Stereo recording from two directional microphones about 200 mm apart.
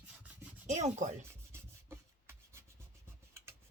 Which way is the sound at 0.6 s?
35° right (ahead or behind).